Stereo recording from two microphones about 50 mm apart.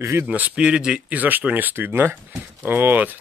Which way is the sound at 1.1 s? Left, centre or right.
Right.